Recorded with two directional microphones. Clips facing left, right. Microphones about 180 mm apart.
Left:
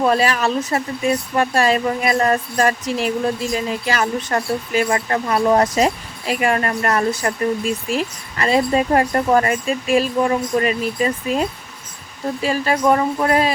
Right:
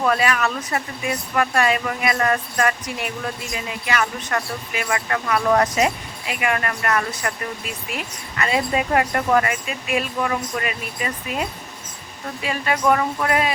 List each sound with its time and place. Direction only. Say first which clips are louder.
0.0 s speech: left 3 dB; 30° left (ahead or behind)